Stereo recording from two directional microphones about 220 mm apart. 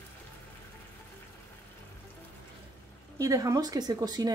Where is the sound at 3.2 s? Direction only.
15° right (ahead or behind).